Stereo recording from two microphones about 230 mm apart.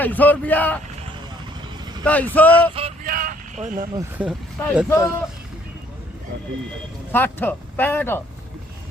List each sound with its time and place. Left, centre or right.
0.0 s speech: centre
2.0 s speech: centre
2.7 s male singing: right
3.1 s vehicle: right
4.2 s speech: centre
4.9 s speech: centre
7.1 s speech: centre